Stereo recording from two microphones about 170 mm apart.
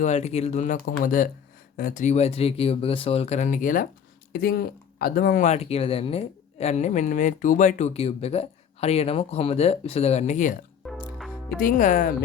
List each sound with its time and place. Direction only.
0.0 s speech: 40° left (ahead or behind); by 5.4 s 60° left (ahead or behind)
5.4 s speech: 40° left (ahead or behind)
10.8 s music: centre (ahead or behind)
11.6 s speech: 50° left (ahead or behind)